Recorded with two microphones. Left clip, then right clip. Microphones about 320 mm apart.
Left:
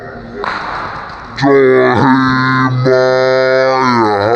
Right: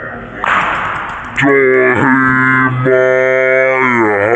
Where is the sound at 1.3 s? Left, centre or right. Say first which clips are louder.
Left 1 dB; left.